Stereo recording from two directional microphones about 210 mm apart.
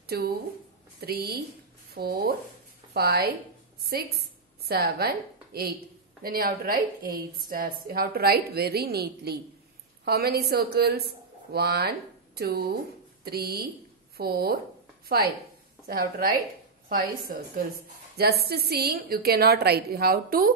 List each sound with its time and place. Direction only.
0.0 s a woman's voice: 45° right (ahead or behind)
15.9 s a woman's voice: 45° right (ahead or behind)